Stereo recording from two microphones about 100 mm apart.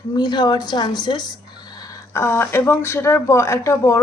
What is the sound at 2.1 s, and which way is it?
A woman's voice, 25° left (ahead or behind).